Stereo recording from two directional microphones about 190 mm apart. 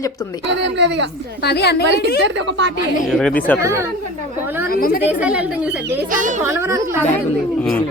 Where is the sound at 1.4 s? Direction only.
60° left (ahead or behind).